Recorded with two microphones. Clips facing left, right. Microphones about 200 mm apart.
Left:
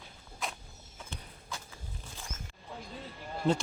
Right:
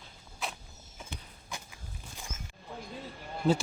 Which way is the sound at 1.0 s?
15° right (ahead or behind).